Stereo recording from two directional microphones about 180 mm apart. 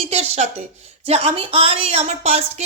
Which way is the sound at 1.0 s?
35° right (ahead or behind).